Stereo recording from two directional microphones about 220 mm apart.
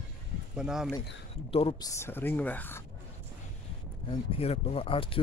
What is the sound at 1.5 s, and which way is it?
Speech, 25° left (ahead or behind).